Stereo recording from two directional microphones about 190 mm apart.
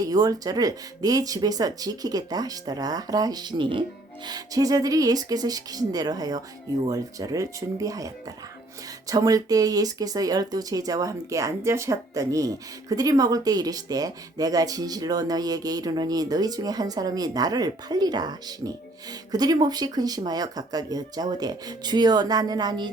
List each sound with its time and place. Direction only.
0.0 s speech: 20° right (ahead or behind)